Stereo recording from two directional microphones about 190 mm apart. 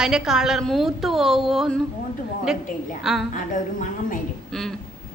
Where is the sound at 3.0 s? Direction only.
Centre (ahead or behind).